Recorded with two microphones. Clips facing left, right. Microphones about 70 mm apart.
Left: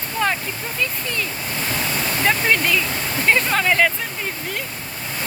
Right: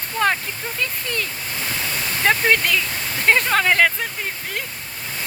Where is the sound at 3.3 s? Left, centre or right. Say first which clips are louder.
Right 1 dB; right.